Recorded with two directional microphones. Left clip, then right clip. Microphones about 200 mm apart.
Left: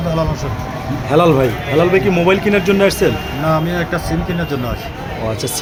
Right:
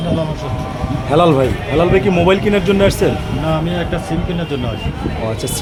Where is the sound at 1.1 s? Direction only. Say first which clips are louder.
Even; centre (ahead or behind).